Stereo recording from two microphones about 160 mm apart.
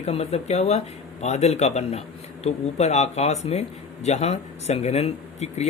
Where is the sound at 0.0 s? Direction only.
40° left (ahead or behind).